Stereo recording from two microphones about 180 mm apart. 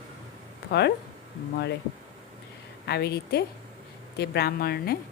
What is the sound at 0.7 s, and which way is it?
Speech, 70° left (ahead or behind).